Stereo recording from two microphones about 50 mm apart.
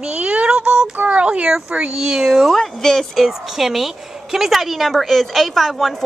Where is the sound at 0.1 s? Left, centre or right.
Right.